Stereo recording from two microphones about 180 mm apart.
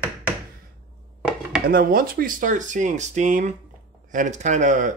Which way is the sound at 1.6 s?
55° right (ahead or behind).